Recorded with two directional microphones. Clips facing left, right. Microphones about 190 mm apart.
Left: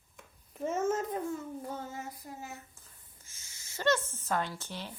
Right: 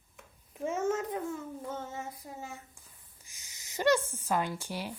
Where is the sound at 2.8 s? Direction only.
15° right (ahead or behind).